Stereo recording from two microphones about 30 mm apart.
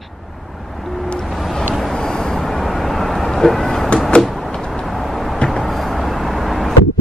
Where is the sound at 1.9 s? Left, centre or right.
Centre.